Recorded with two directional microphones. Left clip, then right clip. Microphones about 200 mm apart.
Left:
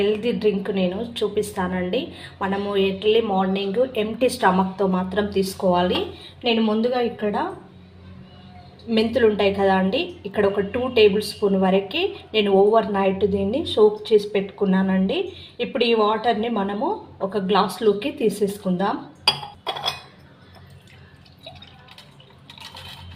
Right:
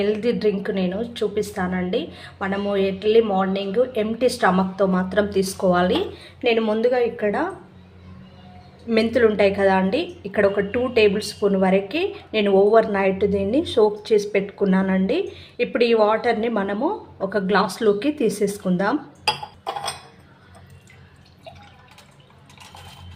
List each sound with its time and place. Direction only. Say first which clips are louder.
0.1 s a woman's voice: even; 20° right (ahead or behind); by 7.3 s 45° right (ahead or behind)
9.0 s a woman's voice: right 1 dB; 35° right (ahead or behind)